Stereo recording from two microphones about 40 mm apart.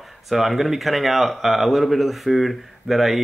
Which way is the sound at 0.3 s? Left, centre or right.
Centre.